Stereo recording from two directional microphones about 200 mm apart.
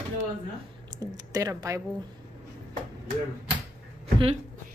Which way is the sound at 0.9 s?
20° right (ahead or behind).